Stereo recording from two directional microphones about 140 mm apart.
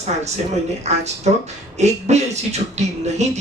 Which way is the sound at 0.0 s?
50° right (ahead or behind).